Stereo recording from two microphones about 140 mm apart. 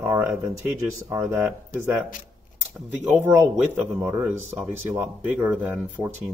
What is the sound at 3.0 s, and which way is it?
Speech, 15° right (ahead or behind).